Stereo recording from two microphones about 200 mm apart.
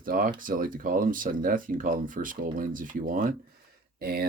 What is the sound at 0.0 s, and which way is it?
Speech, 45° right (ahead or behind).